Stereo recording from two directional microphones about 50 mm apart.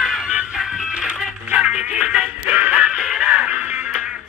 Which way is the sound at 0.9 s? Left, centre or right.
Right.